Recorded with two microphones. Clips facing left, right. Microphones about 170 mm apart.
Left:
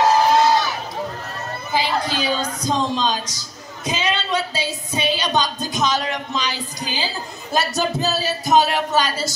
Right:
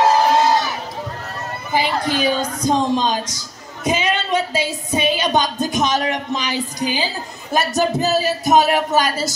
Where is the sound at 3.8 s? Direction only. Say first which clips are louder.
Right 4 dB; 50° right (ahead or behind).